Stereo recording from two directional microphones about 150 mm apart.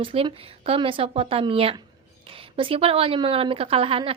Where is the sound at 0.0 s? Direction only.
35° right (ahead or behind).